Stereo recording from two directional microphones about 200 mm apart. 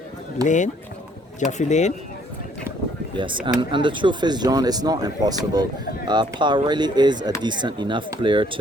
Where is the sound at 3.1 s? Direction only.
25° right (ahead or behind).